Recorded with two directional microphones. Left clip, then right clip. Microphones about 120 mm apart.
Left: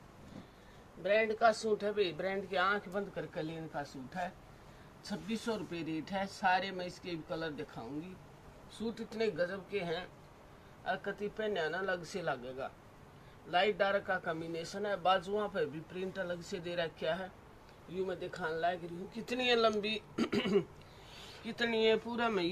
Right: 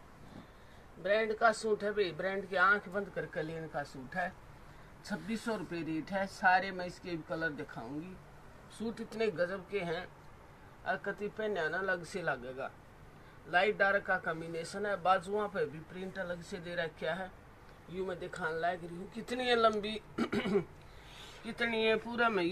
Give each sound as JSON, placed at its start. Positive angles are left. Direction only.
{"t": 1.0, "sound": "speech", "side_deg": 5}
{"t": 3.3, "sound": "speech", "side_deg": -25}
{"t": 5.0, "sound": "speech", "side_deg": -10}
{"t": 10.8, "sound": "speech", "side_deg": 0}
{"t": 15.9, "sound": "speech", "side_deg": 15}
{"t": 21.5, "sound": "speech", "side_deg": -15}